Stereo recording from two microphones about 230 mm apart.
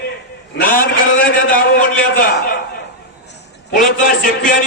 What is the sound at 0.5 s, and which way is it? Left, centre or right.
A man's voice, left.